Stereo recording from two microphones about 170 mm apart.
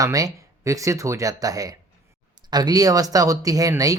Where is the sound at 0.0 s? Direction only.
20° right (ahead or behind).